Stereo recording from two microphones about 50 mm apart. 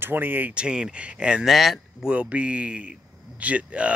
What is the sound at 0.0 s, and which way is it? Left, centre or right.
Speech, right.